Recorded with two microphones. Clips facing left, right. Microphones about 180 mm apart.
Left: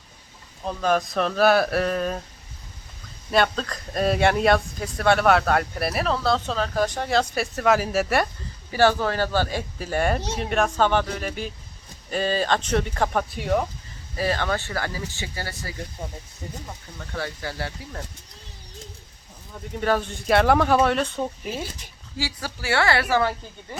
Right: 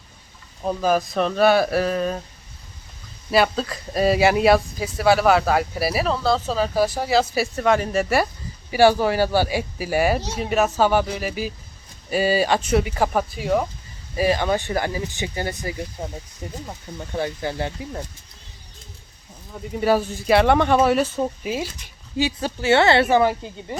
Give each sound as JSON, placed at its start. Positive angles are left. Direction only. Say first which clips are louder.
{"t": 0.6, "sound": "speech", "louder": "right 2 dB", "side_deg": -10}
{"t": 3.3, "sound": "speech", "louder": "right 3 dB", "side_deg": -5}
{"t": 8.7, "sound": "speech", "louder": "right 4 dB", "side_deg": -10}
{"t": 14.2, "sound": "speech", "louder": "right 5 dB", "side_deg": -15}
{"t": 19.7, "sound": "speech", "louder": "right 4 dB", "side_deg": -10}
{"t": 22.2, "sound": "speech", "louder": "right 8 dB", "side_deg": -20}